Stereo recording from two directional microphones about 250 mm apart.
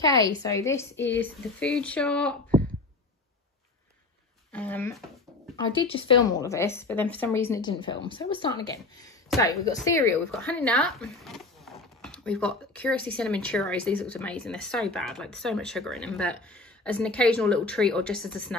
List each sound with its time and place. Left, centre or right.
0.0 s speech: centre
4.5 s speech: centre
5.6 s speech: left; by 18.6 s centre